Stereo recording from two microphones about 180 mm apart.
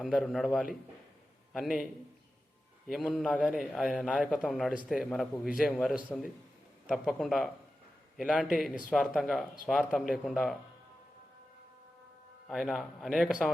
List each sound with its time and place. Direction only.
0.0 s a man's voice: centre (ahead or behind)
12.5 s a man's voice: centre (ahead or behind)